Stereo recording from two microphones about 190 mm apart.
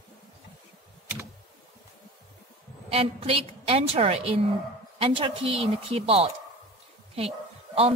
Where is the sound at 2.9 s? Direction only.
30° right (ahead or behind).